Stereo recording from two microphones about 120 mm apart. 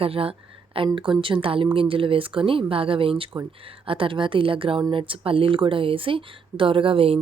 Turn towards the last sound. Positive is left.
turn(degrees=-50)  # may be behind; listen again after turning